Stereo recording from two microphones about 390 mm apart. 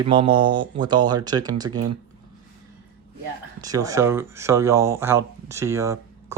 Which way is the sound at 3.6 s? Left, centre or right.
Centre.